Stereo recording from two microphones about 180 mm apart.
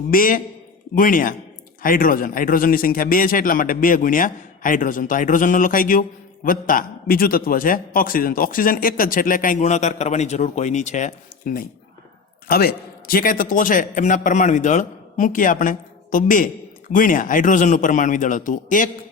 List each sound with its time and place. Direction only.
0.1 s speech: 50° left (ahead or behind)
12.5 s speech: 55° left (ahead or behind)